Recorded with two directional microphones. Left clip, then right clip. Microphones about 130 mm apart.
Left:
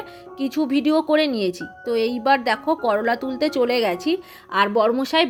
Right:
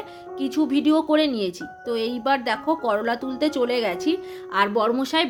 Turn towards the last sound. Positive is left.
turn(degrees=30)  # may be behind; listen again after turning